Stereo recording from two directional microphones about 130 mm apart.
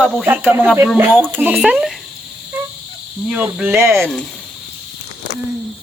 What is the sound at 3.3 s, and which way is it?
Speech, 10° right (ahead or behind).